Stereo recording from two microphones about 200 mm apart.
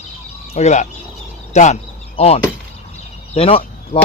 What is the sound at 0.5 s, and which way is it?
Speech, 35° left (ahead or behind).